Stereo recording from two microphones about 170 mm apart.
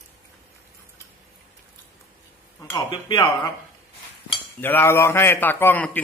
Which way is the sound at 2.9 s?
30° left (ahead or behind).